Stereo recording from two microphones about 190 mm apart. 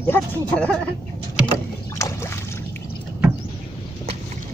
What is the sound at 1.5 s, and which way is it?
Boat, 15° left (ahead or behind).